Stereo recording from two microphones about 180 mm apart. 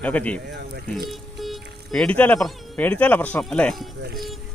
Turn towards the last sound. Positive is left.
turn(degrees=-65)  # may be behind; listen again after turning